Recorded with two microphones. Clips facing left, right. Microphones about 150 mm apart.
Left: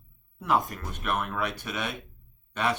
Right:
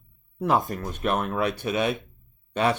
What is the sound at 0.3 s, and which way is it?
Speech, 30° right (ahead or behind).